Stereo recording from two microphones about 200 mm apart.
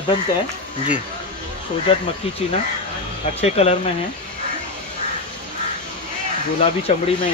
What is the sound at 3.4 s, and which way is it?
Speech, 30° left (ahead or behind).